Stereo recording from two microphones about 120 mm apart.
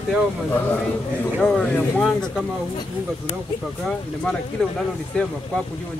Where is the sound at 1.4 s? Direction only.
5° left (ahead or behind).